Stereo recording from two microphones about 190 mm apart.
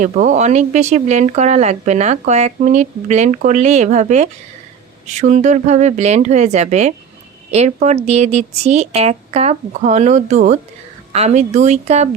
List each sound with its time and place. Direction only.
0.0 s speech: 40° right (ahead or behind)